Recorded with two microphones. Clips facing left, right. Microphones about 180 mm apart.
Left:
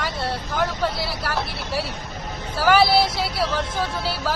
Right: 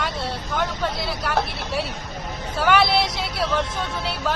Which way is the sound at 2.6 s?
5° left (ahead or behind).